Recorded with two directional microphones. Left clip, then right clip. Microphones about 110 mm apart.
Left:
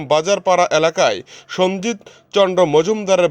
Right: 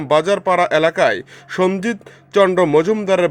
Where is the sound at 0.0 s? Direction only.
25° left (ahead or behind).